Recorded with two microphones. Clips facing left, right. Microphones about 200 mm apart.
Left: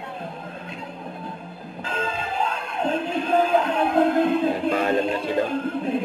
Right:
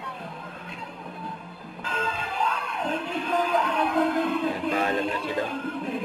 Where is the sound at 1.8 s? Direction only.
25° left (ahead or behind).